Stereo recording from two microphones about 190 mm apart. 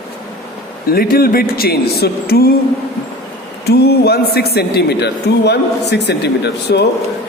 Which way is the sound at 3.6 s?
60° left (ahead or behind).